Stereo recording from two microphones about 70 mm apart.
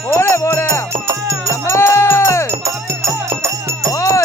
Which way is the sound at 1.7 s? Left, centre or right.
Left.